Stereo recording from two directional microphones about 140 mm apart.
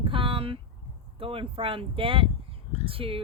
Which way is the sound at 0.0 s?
40° right (ahead or behind).